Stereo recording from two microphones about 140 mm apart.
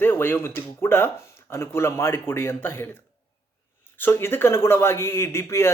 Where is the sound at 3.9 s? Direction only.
15° left (ahead or behind).